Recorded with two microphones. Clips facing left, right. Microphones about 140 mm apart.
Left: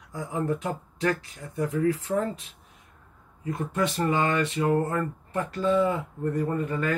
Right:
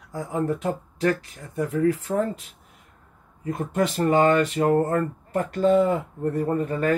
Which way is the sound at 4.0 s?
45° right (ahead or behind).